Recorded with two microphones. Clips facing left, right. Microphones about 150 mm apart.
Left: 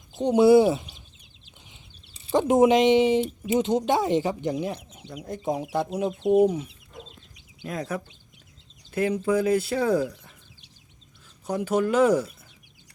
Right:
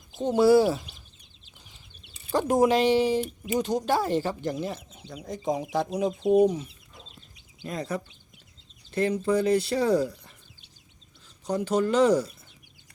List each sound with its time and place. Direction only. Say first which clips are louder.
0.2 s speech: left 3 dB; 20° left (ahead or behind)
2.2 s speech: left 3 dB; 20° left (ahead or behind)
5.0 s speech: even; 5° left (ahead or behind)
11.4 s speech: left 1 dB; 5° left (ahead or behind)